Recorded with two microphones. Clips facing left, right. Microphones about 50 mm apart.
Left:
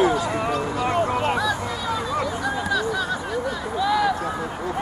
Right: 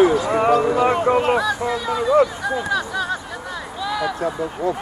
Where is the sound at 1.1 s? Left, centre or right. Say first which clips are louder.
Right 4 dB; centre.